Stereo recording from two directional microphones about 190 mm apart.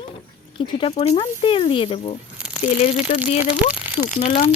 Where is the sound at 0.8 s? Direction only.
30° left (ahead or behind).